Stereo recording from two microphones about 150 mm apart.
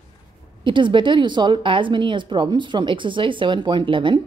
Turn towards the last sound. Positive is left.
turn(degrees=-35)  # may be behind; listen again after turning